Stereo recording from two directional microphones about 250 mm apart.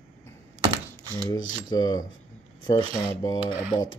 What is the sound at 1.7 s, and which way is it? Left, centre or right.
Speech, centre.